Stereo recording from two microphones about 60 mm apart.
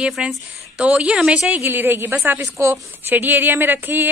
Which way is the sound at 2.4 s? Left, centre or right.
Right.